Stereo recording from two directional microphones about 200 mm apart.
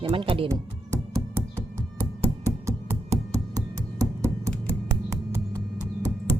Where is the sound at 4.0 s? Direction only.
15° right (ahead or behind).